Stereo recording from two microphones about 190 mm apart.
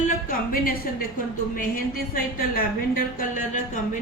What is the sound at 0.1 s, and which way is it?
A woman's voice, 50° left (ahead or behind).